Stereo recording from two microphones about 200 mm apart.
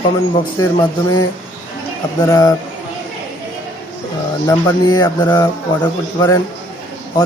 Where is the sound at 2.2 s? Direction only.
15° left (ahead or behind).